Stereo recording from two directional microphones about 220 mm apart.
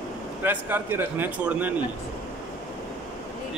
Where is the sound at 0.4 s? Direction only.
10° right (ahead or behind).